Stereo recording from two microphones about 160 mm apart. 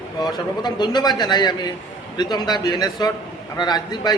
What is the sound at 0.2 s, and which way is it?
A man's voice, 25° left (ahead or behind).